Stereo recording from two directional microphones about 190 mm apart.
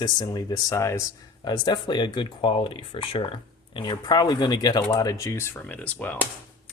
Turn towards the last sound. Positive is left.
turn(degrees=10)  # may be behind; listen again after turning